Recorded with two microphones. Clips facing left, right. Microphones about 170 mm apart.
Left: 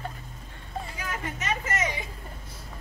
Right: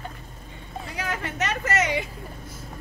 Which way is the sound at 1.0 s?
80° right.